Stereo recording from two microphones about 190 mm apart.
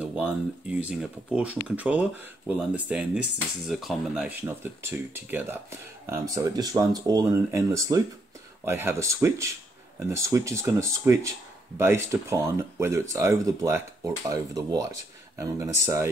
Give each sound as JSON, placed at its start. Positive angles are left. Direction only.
{"t": 0.0, "sound": "speech", "side_deg": -5}